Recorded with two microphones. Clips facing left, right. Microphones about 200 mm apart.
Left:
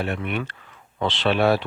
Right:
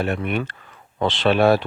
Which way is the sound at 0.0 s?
45° right (ahead or behind).